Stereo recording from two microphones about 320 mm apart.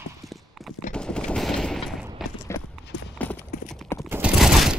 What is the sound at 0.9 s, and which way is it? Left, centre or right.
Gunshot, centre.